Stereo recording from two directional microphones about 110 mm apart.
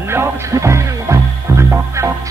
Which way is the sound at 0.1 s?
25° right (ahead or behind).